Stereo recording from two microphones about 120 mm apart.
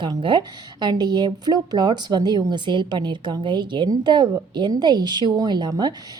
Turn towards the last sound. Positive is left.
turn(degrees=-35)  # may be behind; listen again after turning